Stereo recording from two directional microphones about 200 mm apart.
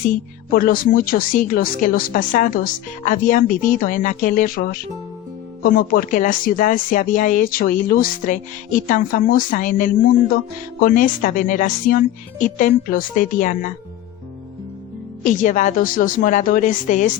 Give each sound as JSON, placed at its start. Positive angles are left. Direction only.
{"t": 0.1, "sound": "speech", "side_deg": 45}
{"t": 15.2, "sound": "speech", "side_deg": 40}